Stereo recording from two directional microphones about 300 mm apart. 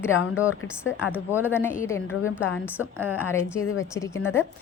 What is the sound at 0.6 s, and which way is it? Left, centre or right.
Speech, left.